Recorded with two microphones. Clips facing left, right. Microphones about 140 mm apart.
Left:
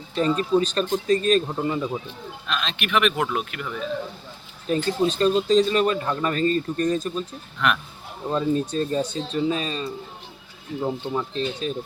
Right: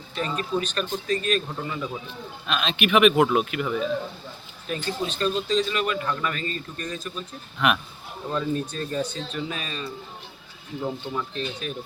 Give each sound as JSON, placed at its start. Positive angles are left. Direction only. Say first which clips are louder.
{"t": 0.2, "sound": "speech", "louder": "left 7 dB", "side_deg": 35}
{"t": 2.5, "sound": "speech", "louder": "right 3 dB", "side_deg": -5}
{"t": 4.7, "sound": "speech", "louder": "left 7 dB", "side_deg": 35}
{"t": 8.3, "sound": "speech", "louder": "left 4 dB", "side_deg": 25}